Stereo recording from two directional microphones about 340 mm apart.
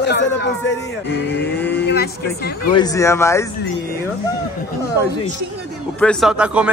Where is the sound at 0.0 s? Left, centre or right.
Left.